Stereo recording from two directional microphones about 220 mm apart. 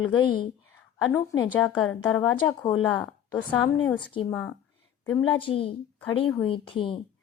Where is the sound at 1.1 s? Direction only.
10° left (ahead or behind).